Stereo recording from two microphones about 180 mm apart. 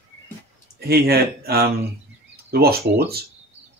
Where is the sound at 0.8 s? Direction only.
60° right (ahead or behind).